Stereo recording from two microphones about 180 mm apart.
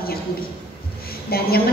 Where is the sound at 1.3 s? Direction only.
55° left (ahead or behind).